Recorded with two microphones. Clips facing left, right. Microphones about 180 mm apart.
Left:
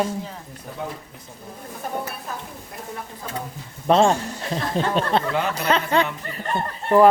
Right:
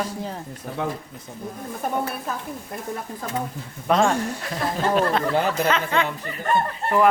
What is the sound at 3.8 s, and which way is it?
Speech, 25° left (ahead or behind).